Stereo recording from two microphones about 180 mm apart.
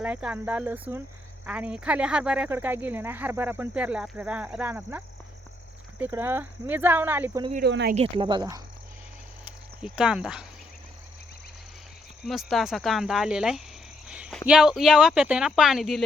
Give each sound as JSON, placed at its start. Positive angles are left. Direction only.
{"t": 0.0, "sound": "speech", "side_deg": -5}
{"t": 7.6, "sound": "speech", "side_deg": -70}
{"t": 7.9, "sound": "speech", "side_deg": -30}
{"t": 9.4, "sound": "cricket", "side_deg": -5}
{"t": 12.2, "sound": "speech", "side_deg": 0}